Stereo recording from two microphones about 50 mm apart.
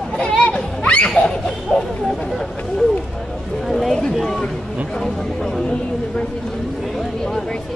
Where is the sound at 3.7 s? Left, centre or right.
Centre.